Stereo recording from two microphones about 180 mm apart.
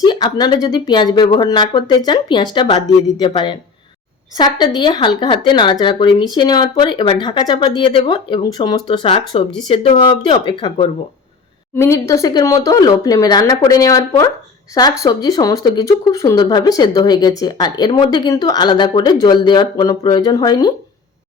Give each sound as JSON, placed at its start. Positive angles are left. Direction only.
{"t": 0.0, "sound": "speech", "side_deg": 25}
{"t": 11.8, "sound": "speech", "side_deg": 15}